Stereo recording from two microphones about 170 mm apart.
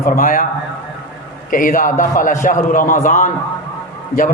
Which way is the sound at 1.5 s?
55° left (ahead or behind).